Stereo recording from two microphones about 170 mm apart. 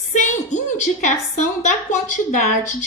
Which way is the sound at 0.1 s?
45° left (ahead or behind).